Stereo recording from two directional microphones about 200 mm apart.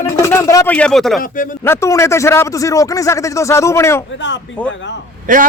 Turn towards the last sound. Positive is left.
turn(degrees=-40)  # may be behind; listen again after turning